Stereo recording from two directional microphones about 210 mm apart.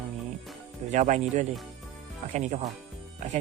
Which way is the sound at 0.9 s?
35° right (ahead or behind).